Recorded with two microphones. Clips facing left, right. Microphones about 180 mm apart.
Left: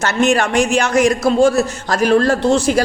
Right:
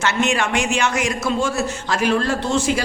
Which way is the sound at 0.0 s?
40° left (ahead or behind).